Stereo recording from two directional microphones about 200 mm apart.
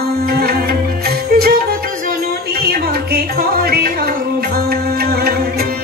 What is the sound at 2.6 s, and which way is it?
Music, 50° right (ahead or behind).